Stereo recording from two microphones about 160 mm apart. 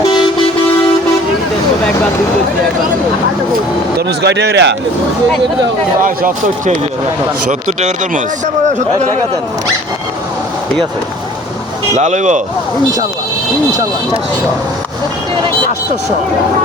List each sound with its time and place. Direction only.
3.9 s speech: 90° right
6.0 s speech: 55° right (ahead or behind)
7.8 s speech: 45° right (ahead or behind)
11.9 s speech: 45° right (ahead or behind)